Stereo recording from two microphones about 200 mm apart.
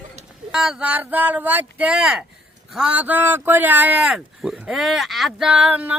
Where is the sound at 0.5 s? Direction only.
5° right (ahead or behind).